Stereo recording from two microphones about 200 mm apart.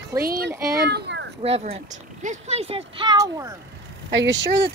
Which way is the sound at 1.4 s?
30° right (ahead or behind).